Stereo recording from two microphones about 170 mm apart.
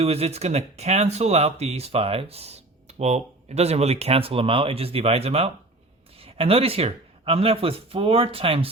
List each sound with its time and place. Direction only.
0.0 s speech: 35° right (ahead or behind)